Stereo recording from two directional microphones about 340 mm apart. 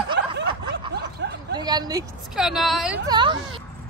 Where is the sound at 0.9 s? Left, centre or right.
Right.